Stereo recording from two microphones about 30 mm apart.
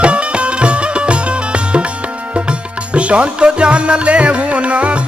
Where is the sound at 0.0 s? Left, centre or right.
Right.